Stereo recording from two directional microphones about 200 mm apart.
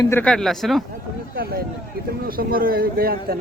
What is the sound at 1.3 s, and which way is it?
Speech, 50° right (ahead or behind).